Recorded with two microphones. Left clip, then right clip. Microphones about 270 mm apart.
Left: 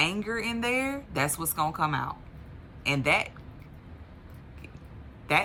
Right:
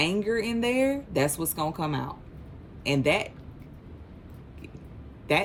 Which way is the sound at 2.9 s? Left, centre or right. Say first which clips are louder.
Even; centre.